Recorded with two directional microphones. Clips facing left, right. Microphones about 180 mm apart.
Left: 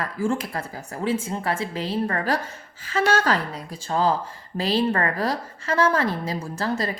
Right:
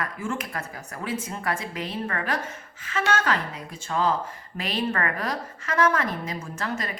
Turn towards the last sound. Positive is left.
turn(degrees=35)  # may be behind; listen again after turning